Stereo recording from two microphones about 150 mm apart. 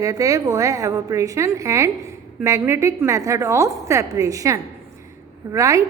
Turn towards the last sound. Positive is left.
turn(degrees=-20)  # may be behind; listen again after turning